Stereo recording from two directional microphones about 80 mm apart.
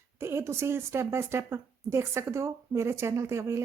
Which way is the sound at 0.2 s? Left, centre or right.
Right.